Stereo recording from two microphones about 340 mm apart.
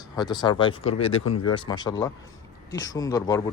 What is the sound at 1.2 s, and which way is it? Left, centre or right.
Speech, left.